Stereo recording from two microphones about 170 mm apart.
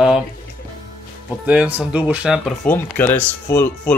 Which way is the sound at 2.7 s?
10° left (ahead or behind).